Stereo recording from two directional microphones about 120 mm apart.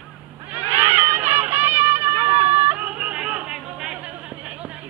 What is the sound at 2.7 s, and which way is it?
Yodeling, 10° right (ahead or behind).